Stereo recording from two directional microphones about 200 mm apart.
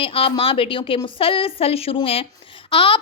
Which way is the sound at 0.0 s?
25° left (ahead or behind).